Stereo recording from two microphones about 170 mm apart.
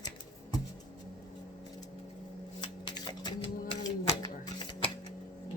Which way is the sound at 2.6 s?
25° left (ahead or behind).